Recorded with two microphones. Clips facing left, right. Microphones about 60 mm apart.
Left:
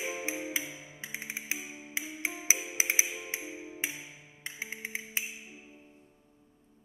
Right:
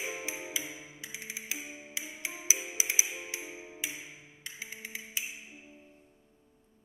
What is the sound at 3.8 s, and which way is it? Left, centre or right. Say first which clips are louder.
Music: left 2 dB; left.